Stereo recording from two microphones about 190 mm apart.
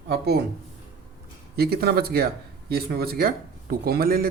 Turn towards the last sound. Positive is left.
turn(degrees=-50)  # may be behind; listen again after turning